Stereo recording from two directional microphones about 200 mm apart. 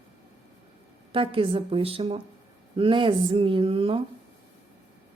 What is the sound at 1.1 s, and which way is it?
Speech, 25° right (ahead or behind).